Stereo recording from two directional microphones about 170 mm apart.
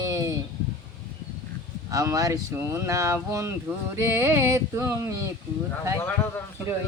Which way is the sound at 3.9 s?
15° right (ahead or behind).